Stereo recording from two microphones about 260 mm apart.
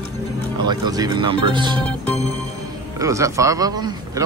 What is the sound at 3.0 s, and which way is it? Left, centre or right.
Speech, centre.